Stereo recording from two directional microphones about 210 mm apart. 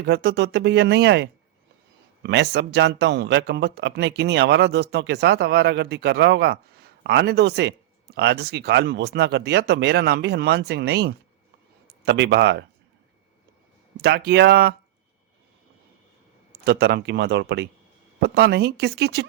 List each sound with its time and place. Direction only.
0.0 s speech: 50° right (ahead or behind)
14.0 s speech: 50° right (ahead or behind)
16.6 s speech: 50° right (ahead or behind)